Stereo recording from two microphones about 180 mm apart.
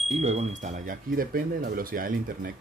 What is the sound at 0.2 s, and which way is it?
Speech, 35° right (ahead or behind).